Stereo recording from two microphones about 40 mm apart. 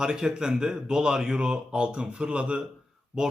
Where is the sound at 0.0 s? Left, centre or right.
Centre.